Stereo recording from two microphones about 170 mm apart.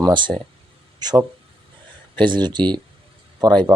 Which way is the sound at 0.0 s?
25° right (ahead or behind).